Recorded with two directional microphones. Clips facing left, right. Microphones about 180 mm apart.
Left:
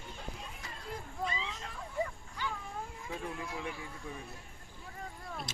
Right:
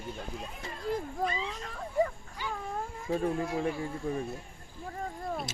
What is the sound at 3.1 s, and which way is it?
Speech, 40° right (ahead or behind).